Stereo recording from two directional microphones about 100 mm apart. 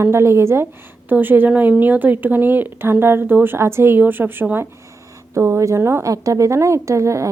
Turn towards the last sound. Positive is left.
turn(degrees=-30)  # may be behind; listen again after turning